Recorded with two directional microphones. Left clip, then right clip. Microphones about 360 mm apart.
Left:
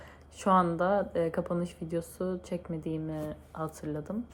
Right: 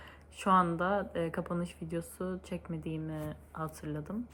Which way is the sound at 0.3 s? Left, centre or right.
Centre.